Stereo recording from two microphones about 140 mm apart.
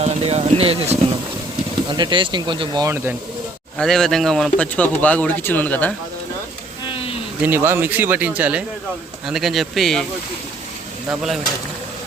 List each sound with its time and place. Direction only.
0.0 s speech: 50° right (ahead or behind)
1.9 s speech: 35° right (ahead or behind)
3.8 s speech: 5° left (ahead or behind)
6.8 s a sound: 40° left (ahead or behind)
7.4 s speech: 15° right (ahead or behind); by 10.1 s centre (ahead or behind)
11.1 s speech: centre (ahead or behind)